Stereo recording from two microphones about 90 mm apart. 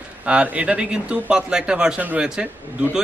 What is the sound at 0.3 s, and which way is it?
A man's voice, 15° right (ahead or behind).